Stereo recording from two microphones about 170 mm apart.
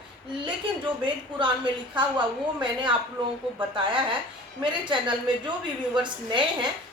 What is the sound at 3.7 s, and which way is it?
A woman's voice, 30° right (ahead or behind).